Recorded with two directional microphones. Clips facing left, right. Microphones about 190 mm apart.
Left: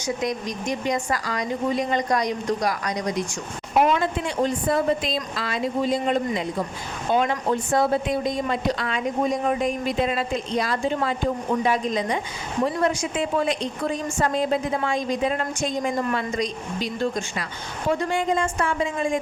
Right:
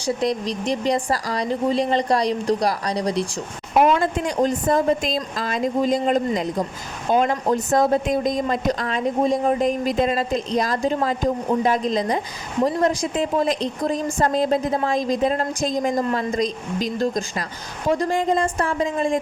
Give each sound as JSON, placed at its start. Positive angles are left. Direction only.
{"t": 0.0, "sound": "speech", "side_deg": -35}
{"t": 3.8, "sound": "a woman's voice", "side_deg": -45}